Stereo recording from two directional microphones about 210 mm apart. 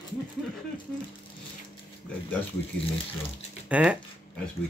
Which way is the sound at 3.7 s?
5° right (ahead or behind).